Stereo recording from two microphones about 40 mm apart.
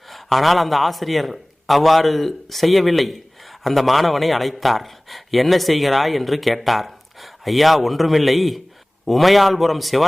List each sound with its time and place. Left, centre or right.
0.1 s a man's voice: centre